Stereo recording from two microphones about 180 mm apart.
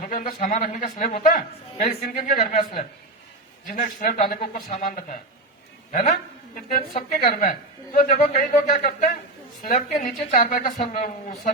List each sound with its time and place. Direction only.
0.0 s a woman's voice: 50° left (ahead or behind)
4.4 s speech: 35° left (ahead or behind)
4.9 s a woman's voice: 55° left (ahead or behind)
7.2 s a woman's voice: 50° left (ahead or behind)